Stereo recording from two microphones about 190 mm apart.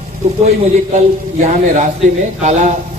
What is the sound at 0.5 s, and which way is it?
A man's voice, 40° right (ahead or behind).